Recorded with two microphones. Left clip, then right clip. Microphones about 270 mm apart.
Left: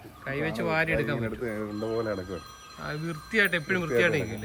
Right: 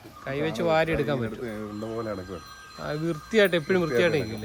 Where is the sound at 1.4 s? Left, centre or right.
Centre.